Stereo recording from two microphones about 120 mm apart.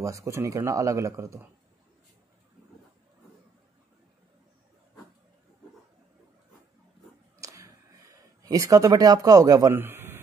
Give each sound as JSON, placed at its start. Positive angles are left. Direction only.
{"t": 0.0, "sound": "speech", "side_deg": -25}
{"t": 7.3, "sound": "a sound", "side_deg": -25}
{"t": 9.8, "sound": "a man's voice", "side_deg": -20}